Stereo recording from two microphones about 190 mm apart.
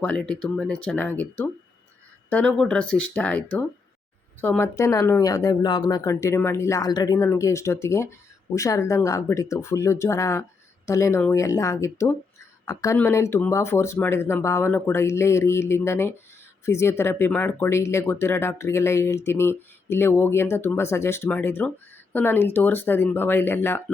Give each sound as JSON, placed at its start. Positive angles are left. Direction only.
{"t": 0.0, "sound": "speech", "side_deg": 5}